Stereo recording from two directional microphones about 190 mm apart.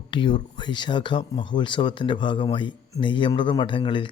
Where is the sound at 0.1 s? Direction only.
25° left (ahead or behind).